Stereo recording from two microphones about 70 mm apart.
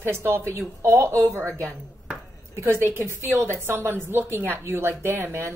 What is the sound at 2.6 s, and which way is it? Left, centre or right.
A woman's voice, right.